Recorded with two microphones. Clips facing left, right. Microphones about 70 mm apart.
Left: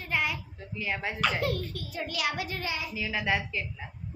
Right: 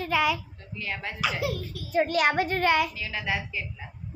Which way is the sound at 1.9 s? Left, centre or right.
Right.